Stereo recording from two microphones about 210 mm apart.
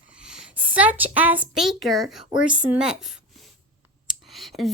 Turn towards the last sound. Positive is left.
turn(degrees=0)  # may be behind; listen again after turning